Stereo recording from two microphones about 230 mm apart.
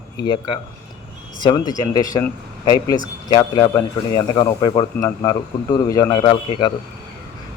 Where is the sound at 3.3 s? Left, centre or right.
Centre.